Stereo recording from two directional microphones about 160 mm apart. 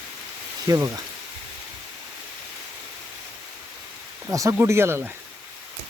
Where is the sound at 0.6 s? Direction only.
20° right (ahead or behind).